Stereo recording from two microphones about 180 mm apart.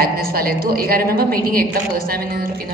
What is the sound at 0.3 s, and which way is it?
A woman's voice, 55° right (ahead or behind).